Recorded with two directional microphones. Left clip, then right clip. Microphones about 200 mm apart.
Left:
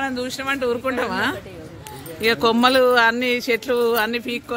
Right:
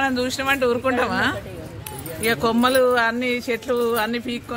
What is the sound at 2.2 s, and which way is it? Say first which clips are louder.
A woman's voice: left 3 dB; 55° left (ahead or behind).